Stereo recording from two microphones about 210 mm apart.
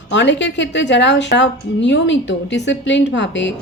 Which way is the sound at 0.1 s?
60° left (ahead or behind).